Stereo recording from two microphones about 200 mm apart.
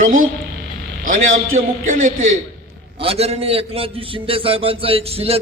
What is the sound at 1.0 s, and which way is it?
Speech, 40° right (ahead or behind).